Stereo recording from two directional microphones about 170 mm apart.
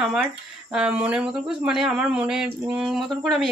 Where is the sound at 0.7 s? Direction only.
5° right (ahead or behind).